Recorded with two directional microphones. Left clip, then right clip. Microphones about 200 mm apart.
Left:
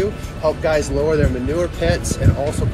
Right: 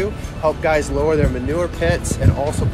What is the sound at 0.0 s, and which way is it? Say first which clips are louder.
Speech: even; 15° right (ahead or behind).